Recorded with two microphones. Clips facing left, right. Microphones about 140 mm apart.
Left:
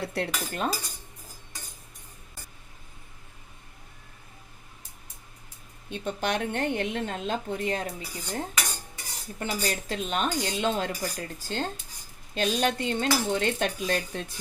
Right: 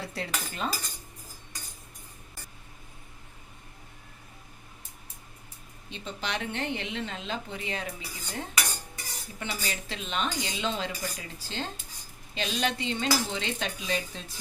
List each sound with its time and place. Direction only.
0.0 s cutlery: 60° left (ahead or behind)
5.9 s a woman's voice: 50° left (ahead or behind)